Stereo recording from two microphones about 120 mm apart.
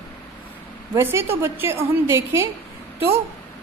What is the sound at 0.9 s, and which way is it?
A woman's voice, 20° right (ahead or behind).